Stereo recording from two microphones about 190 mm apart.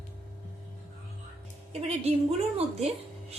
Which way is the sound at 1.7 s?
35° right (ahead or behind).